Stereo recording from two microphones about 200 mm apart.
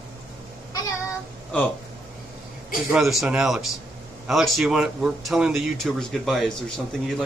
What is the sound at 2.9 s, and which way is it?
Speech, centre (ahead or behind).